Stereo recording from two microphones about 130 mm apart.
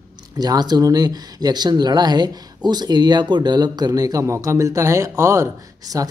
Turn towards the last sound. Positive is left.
turn(degrees=-25)  # may be behind; listen again after turning